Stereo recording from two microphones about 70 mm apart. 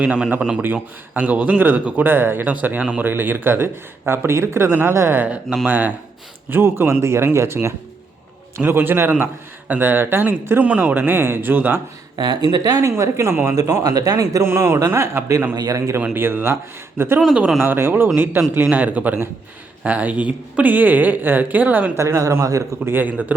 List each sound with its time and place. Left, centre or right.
0.0 s a man's voice: centre
0.6 s speech: right
5.2 s speech: centre
10.7 s speech: right
12.1 s speech: right
12.7 s speech: right
13.6 s a man's voice: right
14.4 s speech: right
15.5 s a man's voice: right
16.1 s speech: right
21.9 s speech: right
22.9 s speech: right